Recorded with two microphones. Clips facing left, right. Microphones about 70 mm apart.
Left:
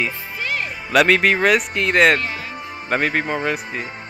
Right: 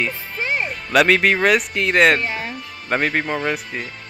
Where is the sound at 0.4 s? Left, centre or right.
Right.